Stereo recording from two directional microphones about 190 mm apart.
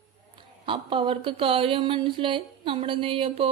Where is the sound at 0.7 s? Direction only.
25° right (ahead or behind).